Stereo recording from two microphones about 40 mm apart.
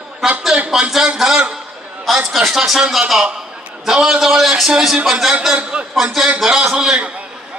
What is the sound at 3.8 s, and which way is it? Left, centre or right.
A man's voice, centre.